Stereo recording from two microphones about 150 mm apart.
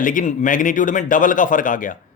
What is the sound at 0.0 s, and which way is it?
Speech, 60° left (ahead or behind).